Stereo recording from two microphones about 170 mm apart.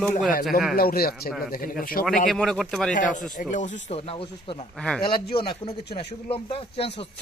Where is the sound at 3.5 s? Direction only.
40° left (ahead or behind).